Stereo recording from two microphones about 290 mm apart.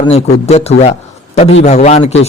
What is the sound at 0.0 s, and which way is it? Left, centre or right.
A man's voice, left.